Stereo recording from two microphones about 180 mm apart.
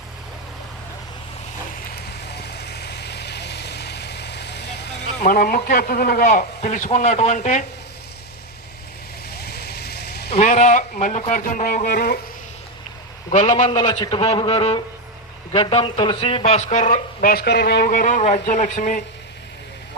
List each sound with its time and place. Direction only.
2.2 s vehicle: 65° left (ahead or behind)
5.2 s a man's voice: 55° left (ahead or behind)
9.3 s vehicle: 60° left (ahead or behind)
10.3 s speech: 40° left (ahead or behind)
11.9 s a sound: 60° left (ahead or behind)
13.3 s a man's voice: 40° left (ahead or behind)
13.7 s a man's voice: 25° left (ahead or behind); by 19.0 s 45° left (ahead or behind)